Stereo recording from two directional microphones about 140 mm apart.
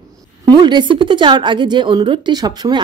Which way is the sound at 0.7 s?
35° right (ahead or behind).